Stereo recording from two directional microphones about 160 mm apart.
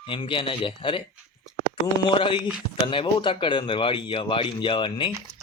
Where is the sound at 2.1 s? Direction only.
30° left (ahead or behind).